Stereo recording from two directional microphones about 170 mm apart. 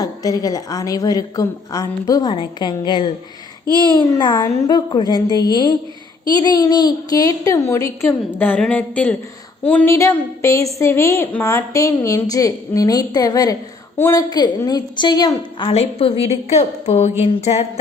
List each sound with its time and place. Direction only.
0.0 s a woman's voice: 20° left (ahead or behind)